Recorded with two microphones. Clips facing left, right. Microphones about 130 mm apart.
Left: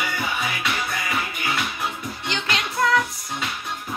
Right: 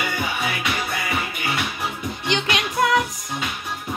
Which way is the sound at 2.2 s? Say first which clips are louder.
Right 4 dB; 20° right (ahead or behind).